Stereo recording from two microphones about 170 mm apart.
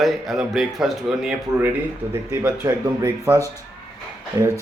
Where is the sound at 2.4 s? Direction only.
15° right (ahead or behind).